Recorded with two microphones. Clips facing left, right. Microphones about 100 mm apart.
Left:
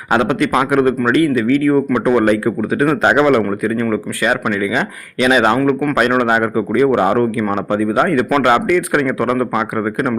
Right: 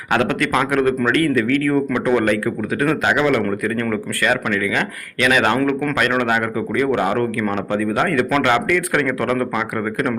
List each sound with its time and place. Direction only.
0.1 s a man's voice: 20° left (ahead or behind)
3.0 s a man's voice: 40° left (ahead or behind)
3.8 s a man's voice: 15° left (ahead or behind)